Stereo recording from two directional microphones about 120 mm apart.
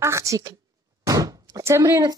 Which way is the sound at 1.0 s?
30° right (ahead or behind).